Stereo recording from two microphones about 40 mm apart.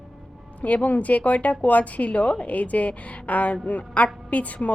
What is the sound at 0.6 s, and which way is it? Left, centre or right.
A woman's voice, left.